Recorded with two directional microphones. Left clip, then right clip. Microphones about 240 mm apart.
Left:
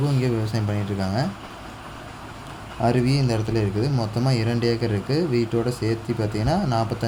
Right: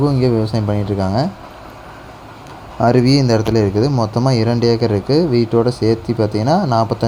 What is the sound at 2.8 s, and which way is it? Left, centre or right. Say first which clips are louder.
Speech: right 9 dB; right.